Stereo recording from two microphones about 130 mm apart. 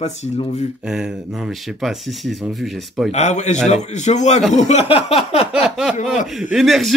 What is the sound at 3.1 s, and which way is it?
Speech, 60° left (ahead or behind).